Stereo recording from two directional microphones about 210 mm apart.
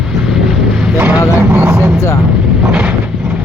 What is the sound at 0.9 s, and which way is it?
Vehicle, 5° right (ahead or behind).